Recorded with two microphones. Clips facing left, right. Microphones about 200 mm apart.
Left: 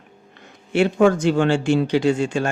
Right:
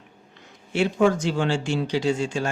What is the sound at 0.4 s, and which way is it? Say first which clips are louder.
Speech: left 5 dB; 60° left (ahead or behind).